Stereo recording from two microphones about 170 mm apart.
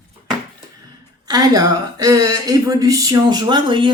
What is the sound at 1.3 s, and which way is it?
Speech, 20° right (ahead or behind).